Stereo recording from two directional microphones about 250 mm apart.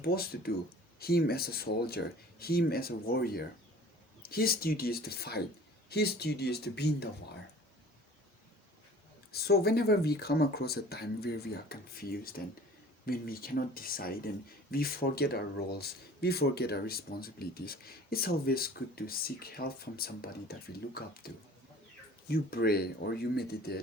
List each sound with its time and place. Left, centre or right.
0.0 s speech: left
9.3 s speech: left